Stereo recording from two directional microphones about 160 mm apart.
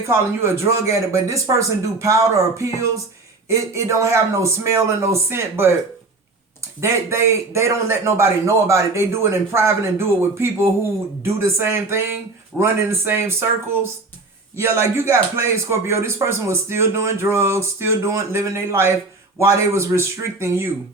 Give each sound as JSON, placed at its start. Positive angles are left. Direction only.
{"t": 0.1, "sound": "a man's voice", "side_deg": -15}
{"t": 14.5, "sound": "a man's voice", "side_deg": -15}